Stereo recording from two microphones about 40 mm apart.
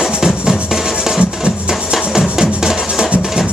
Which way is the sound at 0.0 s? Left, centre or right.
Centre.